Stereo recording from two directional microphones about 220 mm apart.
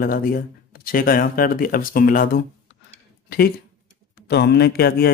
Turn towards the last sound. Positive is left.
turn(degrees=45)  # may be behind; listen again after turning